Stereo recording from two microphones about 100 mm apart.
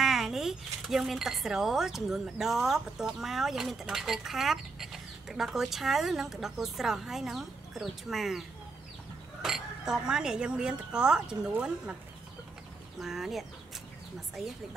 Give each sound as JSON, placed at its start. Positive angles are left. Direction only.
{"t": 0.0, "sound": "speech", "side_deg": -5}
{"t": 13.0, "sound": "speech", "side_deg": -5}